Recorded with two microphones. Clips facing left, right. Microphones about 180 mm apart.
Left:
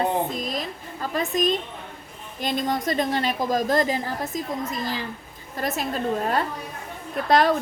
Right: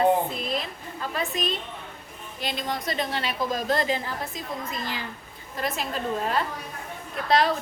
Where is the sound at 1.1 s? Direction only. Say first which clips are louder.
Left 7 dB; 45° left (ahead or behind).